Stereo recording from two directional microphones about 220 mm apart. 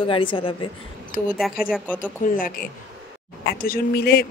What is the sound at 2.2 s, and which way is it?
A woman's voice, 40° left (ahead or behind).